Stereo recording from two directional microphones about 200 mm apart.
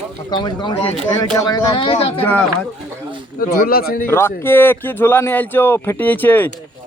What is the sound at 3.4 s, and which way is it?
Speech, 45° left (ahead or behind).